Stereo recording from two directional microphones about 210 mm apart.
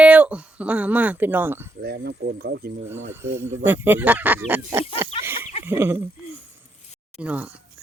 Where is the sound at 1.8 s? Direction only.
50° right (ahead or behind).